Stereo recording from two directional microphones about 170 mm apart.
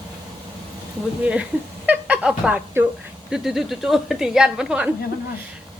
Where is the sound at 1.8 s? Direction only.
5° right (ahead or behind).